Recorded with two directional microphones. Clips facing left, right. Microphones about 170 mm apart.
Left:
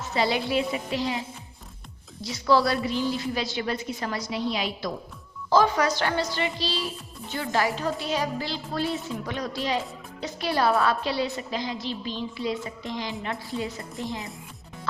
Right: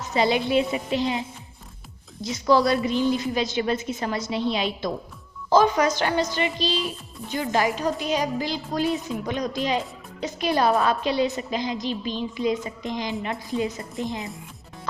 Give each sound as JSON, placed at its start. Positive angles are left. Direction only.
{"t": 0.0, "sound": "a woman's voice", "side_deg": -20}
{"t": 2.2, "sound": "a woman's voice", "side_deg": -20}